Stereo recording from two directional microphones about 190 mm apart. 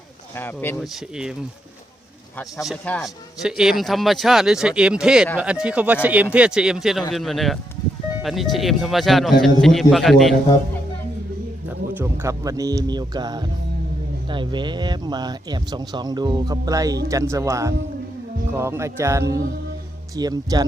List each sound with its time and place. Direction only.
0.3 s speech: 10° left (ahead or behind)
0.9 s speech: 5° right (ahead or behind)
2.6 s speech: 5° left (ahead or behind)
11.9 s speech: 10° right (ahead or behind)